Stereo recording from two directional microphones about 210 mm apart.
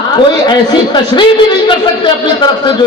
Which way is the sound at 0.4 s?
20° left (ahead or behind).